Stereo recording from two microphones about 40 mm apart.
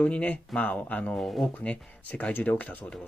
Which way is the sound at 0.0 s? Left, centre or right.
Left.